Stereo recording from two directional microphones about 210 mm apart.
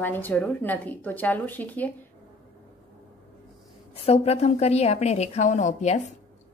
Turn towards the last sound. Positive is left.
turn(degrees=35)  # may be behind; listen again after turning